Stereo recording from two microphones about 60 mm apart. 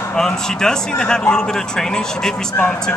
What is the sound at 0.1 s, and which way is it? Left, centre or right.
Speech, centre.